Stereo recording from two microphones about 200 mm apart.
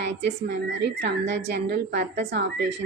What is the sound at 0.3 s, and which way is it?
Speech, 60° right (ahead or behind).